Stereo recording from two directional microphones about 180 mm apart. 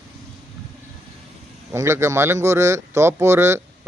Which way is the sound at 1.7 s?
15° right (ahead or behind).